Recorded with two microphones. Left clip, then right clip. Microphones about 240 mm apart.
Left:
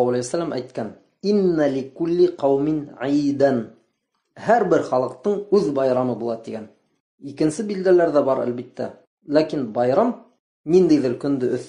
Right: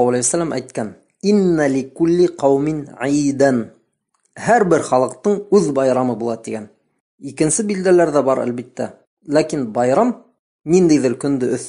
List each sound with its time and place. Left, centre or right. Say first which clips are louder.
0.0 s speech: right 4 dB; right